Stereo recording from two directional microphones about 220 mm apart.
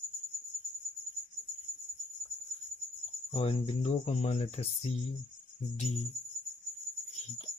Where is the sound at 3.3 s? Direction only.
25° left (ahead or behind).